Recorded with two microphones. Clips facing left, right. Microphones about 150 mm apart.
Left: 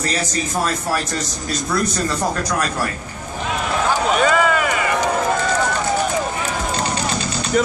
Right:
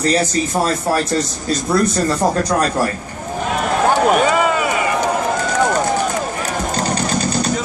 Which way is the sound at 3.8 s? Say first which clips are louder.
Right 6 dB; 55° right (ahead or behind).